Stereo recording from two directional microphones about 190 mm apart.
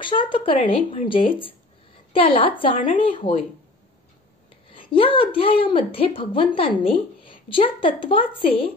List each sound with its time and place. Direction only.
0.0 s a woman's voice: 25° left (ahead or behind)
4.6 s a woman's voice: 30° left (ahead or behind)